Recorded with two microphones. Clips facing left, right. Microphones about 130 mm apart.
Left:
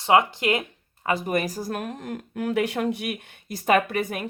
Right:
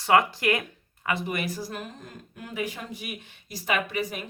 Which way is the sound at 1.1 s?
40° left (ahead or behind).